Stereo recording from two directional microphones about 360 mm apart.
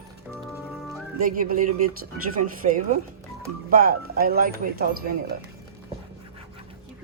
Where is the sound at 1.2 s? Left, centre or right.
Right.